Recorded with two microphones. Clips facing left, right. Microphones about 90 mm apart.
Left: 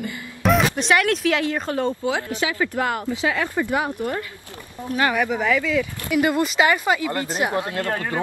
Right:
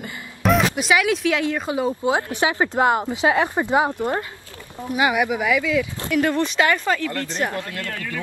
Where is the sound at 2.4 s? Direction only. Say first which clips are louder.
Right 4 dB; 30° right (ahead or behind).